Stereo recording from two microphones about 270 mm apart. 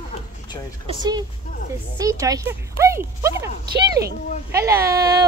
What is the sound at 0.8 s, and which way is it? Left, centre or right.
Speech, centre.